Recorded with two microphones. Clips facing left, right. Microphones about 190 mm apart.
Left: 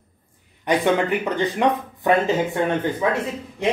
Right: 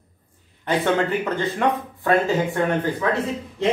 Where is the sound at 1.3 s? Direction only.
15° left (ahead or behind).